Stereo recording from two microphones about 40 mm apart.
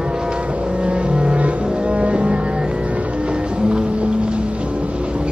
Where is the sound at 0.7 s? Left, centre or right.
Right.